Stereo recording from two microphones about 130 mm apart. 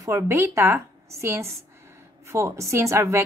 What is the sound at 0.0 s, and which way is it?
A woman's voice, 20° right (ahead or behind).